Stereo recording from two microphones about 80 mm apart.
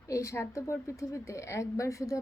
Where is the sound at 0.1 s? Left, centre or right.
Left.